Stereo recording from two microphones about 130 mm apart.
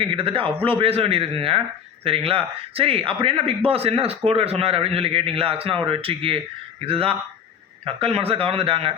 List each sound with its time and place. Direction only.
0.0 s speech: 45° right (ahead or behind)